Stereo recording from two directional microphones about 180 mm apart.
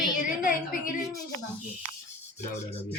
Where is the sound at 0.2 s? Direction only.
50° left (ahead or behind).